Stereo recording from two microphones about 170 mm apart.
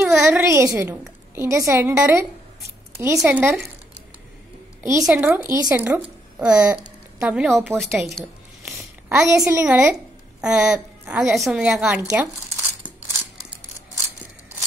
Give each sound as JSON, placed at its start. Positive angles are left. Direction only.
{"t": 0.0, "sound": "a sound", "side_deg": -5}
{"t": 0.4, "sound": "a woman's voice", "side_deg": -15}
{"t": 5.0, "sound": "speech", "side_deg": -10}
{"t": 7.8, "sound": "a sound", "side_deg": 0}
{"t": 9.5, "sound": "speech", "side_deg": -15}
{"t": 10.4, "sound": "a woman's voice", "side_deg": -5}